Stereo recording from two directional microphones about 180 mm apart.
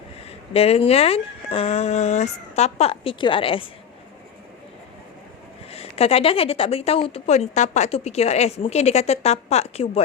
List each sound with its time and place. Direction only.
0.3 s a woman's voice: 35° left (ahead or behind)
5.7 s a woman's voice: 35° left (ahead or behind)